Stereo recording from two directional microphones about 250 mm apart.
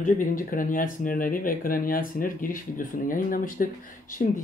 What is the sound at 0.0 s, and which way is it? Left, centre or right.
Speech, left.